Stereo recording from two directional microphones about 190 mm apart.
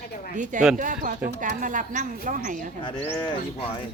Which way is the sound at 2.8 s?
30° left (ahead or behind).